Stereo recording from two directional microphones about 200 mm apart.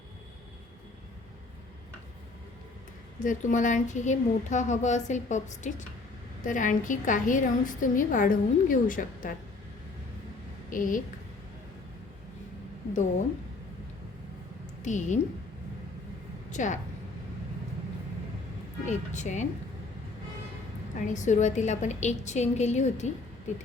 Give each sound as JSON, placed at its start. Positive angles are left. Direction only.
{"t": 3.2, "sound": "a woman's voice", "side_deg": 40}
{"t": 10.7, "sound": "a woman's voice", "side_deg": 40}
{"t": 14.8, "sound": "a woman's voice", "side_deg": 35}
{"t": 16.5, "sound": "a woman's voice", "side_deg": 40}
{"t": 18.9, "sound": "a woman's voice", "side_deg": 35}
{"t": 20.9, "sound": "a woman's voice", "side_deg": 35}